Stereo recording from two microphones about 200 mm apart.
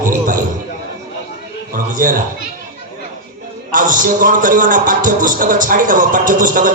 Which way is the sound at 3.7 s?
40° right (ahead or behind).